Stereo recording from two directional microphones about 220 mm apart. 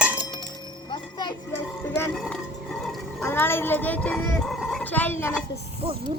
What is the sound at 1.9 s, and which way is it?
Music, 10° left (ahead or behind).